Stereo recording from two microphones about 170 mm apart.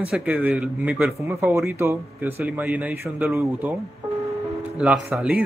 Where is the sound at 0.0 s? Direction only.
5° right (ahead or behind).